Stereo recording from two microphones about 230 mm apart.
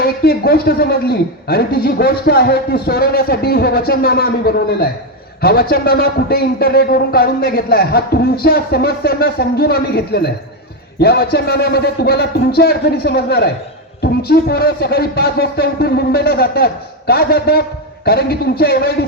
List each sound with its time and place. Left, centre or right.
0.0 s a man's voice: left